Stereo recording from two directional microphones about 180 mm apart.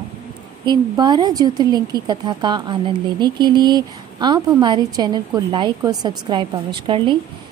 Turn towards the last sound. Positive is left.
turn(degrees=-25)  # may be behind; listen again after turning